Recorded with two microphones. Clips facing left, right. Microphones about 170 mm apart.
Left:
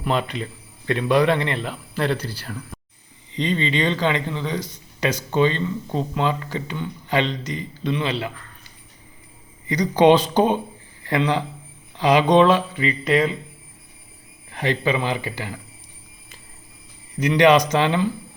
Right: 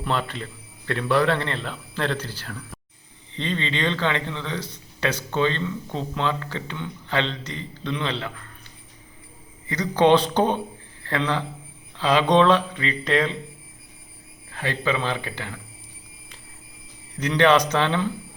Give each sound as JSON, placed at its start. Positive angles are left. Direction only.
{"t": 0.0, "sound": "a man's voice", "side_deg": 15}
{"t": 9.6, "sound": "a man's voice", "side_deg": 15}
{"t": 14.5, "sound": "a man's voice", "side_deg": 20}
{"t": 17.2, "sound": "a man's voice", "side_deg": 10}